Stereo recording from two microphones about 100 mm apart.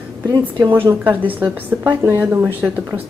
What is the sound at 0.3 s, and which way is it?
Speech, 45° right (ahead or behind).